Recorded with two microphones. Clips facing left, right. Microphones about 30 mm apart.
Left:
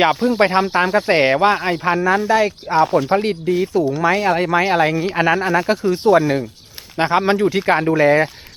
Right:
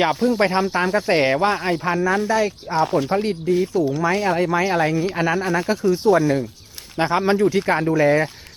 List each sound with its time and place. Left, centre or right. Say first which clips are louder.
0.0 s speech: left 3 dB; left
2.8 s speech: left 2 dB; centre
3.1 s speech: left 4 dB; left
3.5 s speech: left 1 dB; centre
4.4 s speech: left 3 dB; left